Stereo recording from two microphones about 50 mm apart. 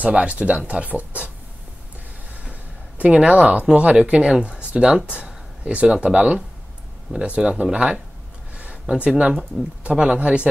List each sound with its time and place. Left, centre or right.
0.1 s speech: right
3.0 s speech: right
8.5 s a sound: right
9.8 s speech: right